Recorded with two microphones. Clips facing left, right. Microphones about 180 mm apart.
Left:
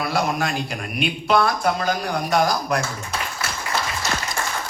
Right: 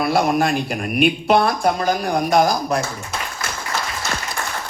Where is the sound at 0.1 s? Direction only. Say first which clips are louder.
Right 6 dB; 50° right (ahead or behind).